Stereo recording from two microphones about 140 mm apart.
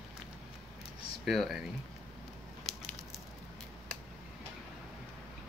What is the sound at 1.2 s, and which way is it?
Speech, centre (ahead or behind).